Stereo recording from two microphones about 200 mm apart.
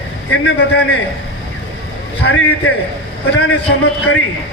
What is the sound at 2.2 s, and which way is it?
Speech, 65° left (ahead or behind).